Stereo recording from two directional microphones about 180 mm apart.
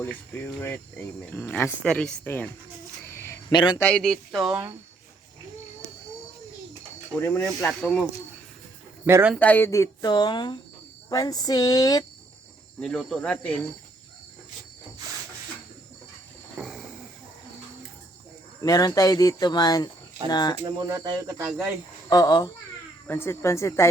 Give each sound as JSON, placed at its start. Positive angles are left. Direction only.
{"t": 0.0, "sound": "speech", "side_deg": 10}
{"t": 3.1, "sound": "a sound", "side_deg": 15}
{"t": 3.5, "sound": "speech", "side_deg": 25}
{"t": 3.8, "sound": "speech", "side_deg": 5}
{"t": 7.2, "sound": "speech", "side_deg": 15}
{"t": 9.0, "sound": "speech", "side_deg": -15}
{"t": 9.3, "sound": "speech", "side_deg": 10}
{"t": 12.8, "sound": "speech", "side_deg": 5}
{"t": 16.6, "sound": "a sound", "side_deg": 0}
{"t": 18.6, "sound": "speech", "side_deg": 20}
{"t": 20.8, "sound": "speech", "side_deg": -20}
{"t": 22.1, "sound": "speech", "side_deg": 25}
{"t": 23.0, "sound": "speech", "side_deg": 15}